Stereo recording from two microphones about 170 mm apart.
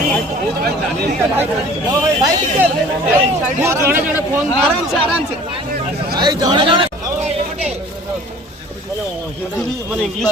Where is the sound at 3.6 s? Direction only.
15° right (ahead or behind).